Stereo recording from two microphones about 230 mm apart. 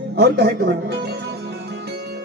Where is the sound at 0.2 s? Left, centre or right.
Right.